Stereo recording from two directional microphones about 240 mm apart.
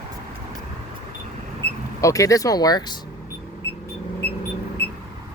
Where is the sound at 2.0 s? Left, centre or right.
Centre.